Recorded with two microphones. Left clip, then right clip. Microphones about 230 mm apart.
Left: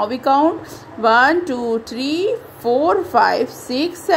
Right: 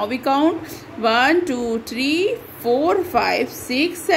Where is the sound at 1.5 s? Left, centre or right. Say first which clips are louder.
Left 2 dB; centre.